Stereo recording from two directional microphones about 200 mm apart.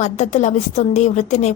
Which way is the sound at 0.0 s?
35° left (ahead or behind).